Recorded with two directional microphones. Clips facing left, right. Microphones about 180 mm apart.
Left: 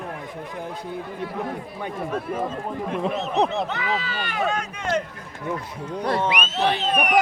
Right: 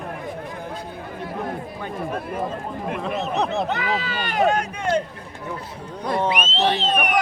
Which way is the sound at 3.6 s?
35° right (ahead or behind).